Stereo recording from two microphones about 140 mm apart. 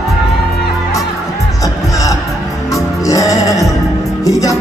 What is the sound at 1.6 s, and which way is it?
Music, 25° left (ahead or behind).